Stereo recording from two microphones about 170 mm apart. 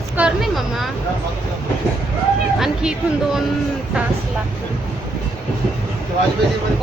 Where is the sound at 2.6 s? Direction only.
5° right (ahead or behind).